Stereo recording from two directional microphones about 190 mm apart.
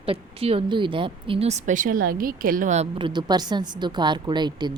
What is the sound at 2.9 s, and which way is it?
Speech, 25° right (ahead or behind).